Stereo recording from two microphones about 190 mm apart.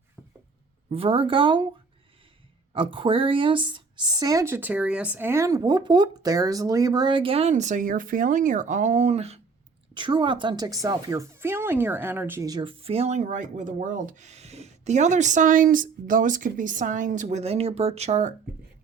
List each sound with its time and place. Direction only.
0.2 s a sound: 5° left (ahead or behind)
0.9 s speech: 30° right (ahead or behind)
2.7 s a woman's voice: 25° right (ahead or behind)